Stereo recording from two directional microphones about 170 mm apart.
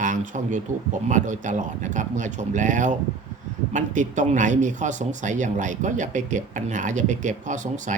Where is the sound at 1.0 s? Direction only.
45° right (ahead or behind).